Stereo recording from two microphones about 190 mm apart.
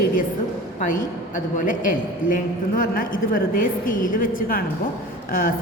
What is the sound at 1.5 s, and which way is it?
A woman's voice, 45° left (ahead or behind).